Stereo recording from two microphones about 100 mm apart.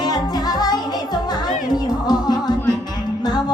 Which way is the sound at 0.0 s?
45° left (ahead or behind).